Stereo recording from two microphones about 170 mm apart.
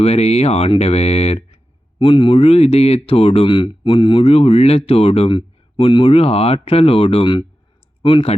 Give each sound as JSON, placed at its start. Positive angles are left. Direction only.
{"t": 0.0, "sound": "speech", "side_deg": 40}